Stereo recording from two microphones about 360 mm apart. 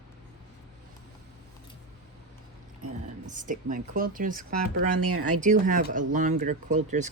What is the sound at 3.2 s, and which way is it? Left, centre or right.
Speech, right.